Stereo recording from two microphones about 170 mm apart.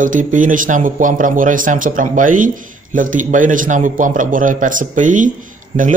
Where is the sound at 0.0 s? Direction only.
50° right (ahead or behind).